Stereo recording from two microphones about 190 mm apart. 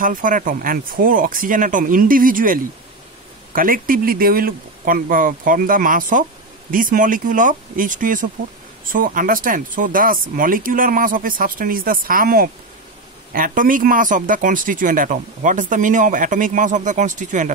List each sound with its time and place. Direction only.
0.0 s speech: 45° right (ahead or behind)